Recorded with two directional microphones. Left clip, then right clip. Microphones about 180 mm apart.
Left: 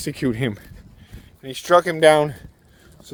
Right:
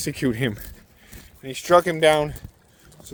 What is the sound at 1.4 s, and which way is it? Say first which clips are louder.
Speech: left 1 dB; 35° left (ahead or behind).